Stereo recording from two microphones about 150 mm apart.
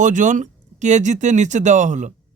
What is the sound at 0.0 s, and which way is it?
Speech, 55° right (ahead or behind).